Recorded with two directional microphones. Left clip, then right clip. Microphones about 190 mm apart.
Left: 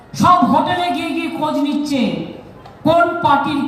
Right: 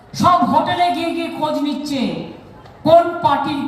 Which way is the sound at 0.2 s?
30° right (ahead or behind).